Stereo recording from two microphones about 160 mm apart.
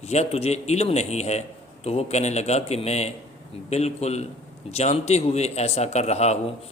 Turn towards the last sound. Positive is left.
turn(degrees=40)  # may be behind; listen again after turning